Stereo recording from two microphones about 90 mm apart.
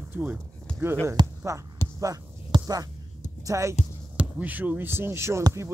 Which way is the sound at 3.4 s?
35° right (ahead or behind).